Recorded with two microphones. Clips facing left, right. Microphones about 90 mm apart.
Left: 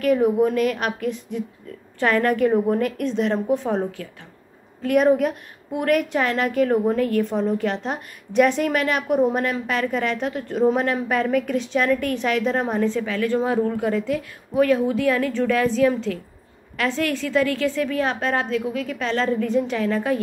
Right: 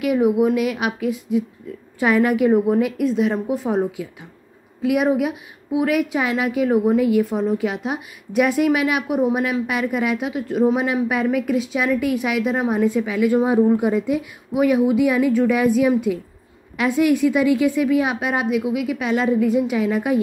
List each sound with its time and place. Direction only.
0.0 s a woman's voice: 10° right (ahead or behind)